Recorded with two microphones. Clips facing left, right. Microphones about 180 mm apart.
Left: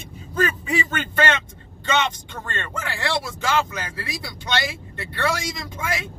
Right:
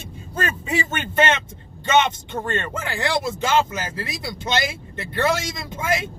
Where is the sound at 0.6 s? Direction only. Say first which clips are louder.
Even; 25° right (ahead or behind).